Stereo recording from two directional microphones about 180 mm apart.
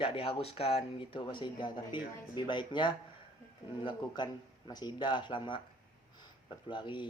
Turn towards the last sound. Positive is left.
turn(degrees=25)  # may be behind; listen again after turning